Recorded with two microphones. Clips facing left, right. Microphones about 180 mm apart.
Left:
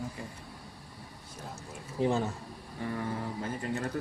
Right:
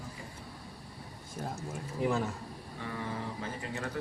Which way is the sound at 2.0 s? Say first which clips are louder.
Left 2 dB; 25° left (ahead or behind).